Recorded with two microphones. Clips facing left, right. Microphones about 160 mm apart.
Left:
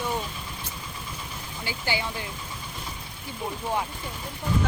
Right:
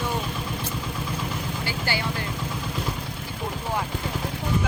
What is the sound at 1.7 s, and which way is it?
Speech, 20° left (ahead or behind).